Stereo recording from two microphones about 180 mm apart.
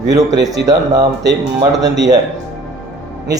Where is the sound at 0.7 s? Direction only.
20° right (ahead or behind).